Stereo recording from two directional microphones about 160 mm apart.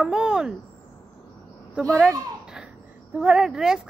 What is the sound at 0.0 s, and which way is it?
Speech, 5° right (ahead or behind).